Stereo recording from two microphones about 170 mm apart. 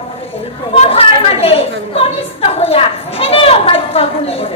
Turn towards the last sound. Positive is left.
turn(degrees=35)  # may be behind; listen again after turning